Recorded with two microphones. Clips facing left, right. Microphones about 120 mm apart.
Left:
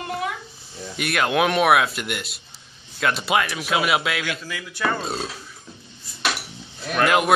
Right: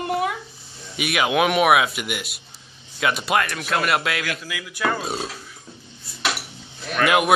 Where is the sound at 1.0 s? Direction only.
5° right (ahead or behind).